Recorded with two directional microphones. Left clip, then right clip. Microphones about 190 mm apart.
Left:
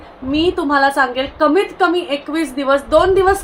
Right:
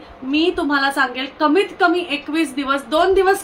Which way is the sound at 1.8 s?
25° right (ahead or behind).